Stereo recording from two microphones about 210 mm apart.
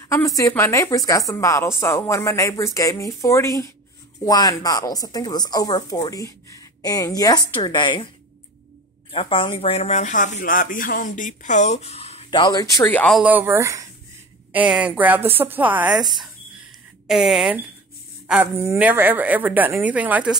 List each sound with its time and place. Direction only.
0.1 s speech: 15° left (ahead or behind)
9.1 s speech: 25° left (ahead or behind); by 13.2 s 5° left (ahead or behind)
13.2 s a woman's voice: 10° right (ahead or behind)